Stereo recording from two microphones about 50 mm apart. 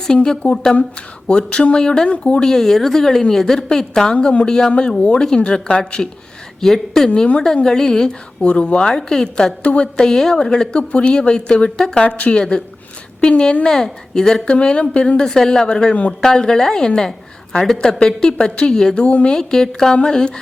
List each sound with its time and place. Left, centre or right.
0.1 s speech: centre
2.4 s speech: centre
6.6 s a woman's voice: centre
8.4 s speech: left
12.0 s speech: left
13.7 s speech: centre
16.2 s speech: centre
18.9 s speech: left
19.3 s speech: centre